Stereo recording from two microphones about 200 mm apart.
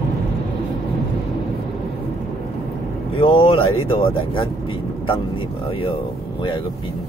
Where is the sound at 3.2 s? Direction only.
25° left (ahead or behind).